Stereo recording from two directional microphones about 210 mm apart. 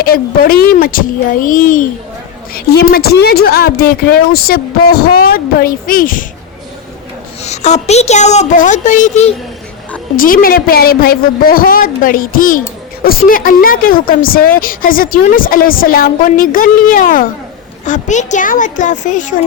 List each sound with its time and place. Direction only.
0.0 s a woman's voice: 45° left (ahead or behind)
2.9 s a woman's voice: 50° left (ahead or behind)
7.4 s a woman's voice: 35° left (ahead or behind)